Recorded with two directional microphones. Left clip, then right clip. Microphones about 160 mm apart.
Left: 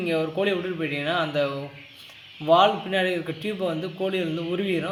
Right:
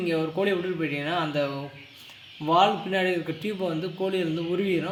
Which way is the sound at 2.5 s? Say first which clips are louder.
Left 3 dB; 15° right (ahead or behind).